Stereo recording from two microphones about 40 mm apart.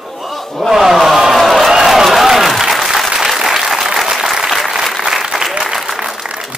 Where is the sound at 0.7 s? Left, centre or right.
Centre.